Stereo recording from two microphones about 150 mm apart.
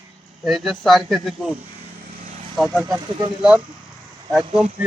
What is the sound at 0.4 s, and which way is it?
Speech, centre (ahead or behind).